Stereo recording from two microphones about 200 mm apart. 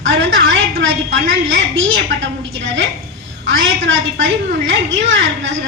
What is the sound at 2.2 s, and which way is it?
A woman's voice, 65° right (ahead or behind).